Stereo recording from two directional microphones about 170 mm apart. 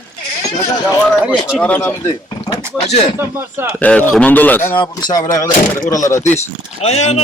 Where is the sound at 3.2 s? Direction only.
15° right (ahead or behind).